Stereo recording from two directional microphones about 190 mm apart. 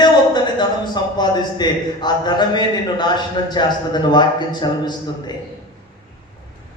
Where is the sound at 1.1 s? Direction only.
20° left (ahead or behind).